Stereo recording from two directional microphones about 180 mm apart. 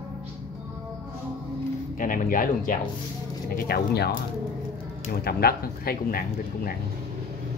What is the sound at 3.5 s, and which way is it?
Speech, 60° left (ahead or behind).